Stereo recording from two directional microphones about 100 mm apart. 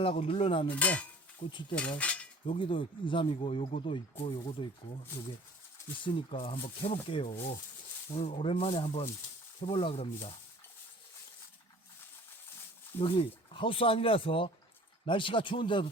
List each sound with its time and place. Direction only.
0.0 s speech: 65° left (ahead or behind)
0.7 s a sound: 15° left (ahead or behind)
2.0 s cutlery: 15° left (ahead or behind)
2.5 s speech: 60° left (ahead or behind)
3.4 s speech: 85° left; by 4.7 s 55° left (ahead or behind)
6.0 s speech: 60° left (ahead or behind)
8.1 s speech: 80° left
13.0 s speech: 65° left (ahead or behind)